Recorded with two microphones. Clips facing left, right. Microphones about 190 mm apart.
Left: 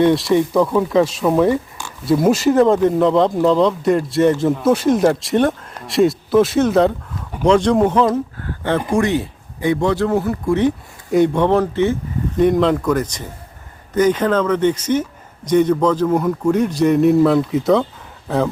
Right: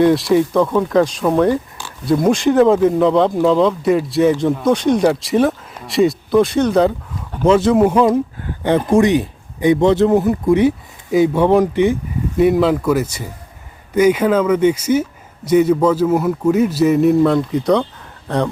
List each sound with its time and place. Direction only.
0.0 s speech: centre (ahead or behind)